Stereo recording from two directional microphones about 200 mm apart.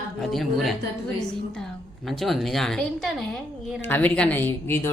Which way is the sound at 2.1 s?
Centre (ahead or behind).